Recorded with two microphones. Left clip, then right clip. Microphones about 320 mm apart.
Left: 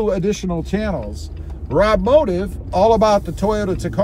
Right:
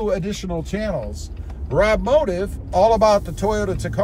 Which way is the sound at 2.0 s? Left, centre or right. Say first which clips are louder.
Left 3 dB; centre.